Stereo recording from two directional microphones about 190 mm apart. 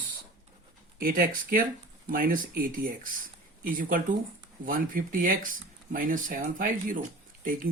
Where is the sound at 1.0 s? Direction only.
50° right (ahead or behind).